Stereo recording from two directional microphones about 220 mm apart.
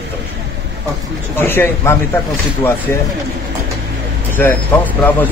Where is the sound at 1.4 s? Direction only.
10° left (ahead or behind).